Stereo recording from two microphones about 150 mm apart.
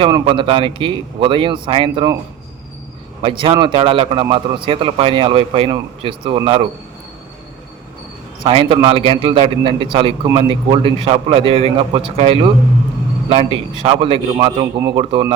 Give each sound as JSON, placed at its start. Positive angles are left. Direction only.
{"t": 0.0, "sound": "speech", "side_deg": -35}
{"t": 3.2, "sound": "speech", "side_deg": -35}
{"t": 8.4, "sound": "speech", "side_deg": -35}